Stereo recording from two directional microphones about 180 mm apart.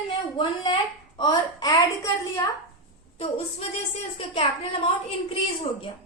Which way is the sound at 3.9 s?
30° left (ahead or behind).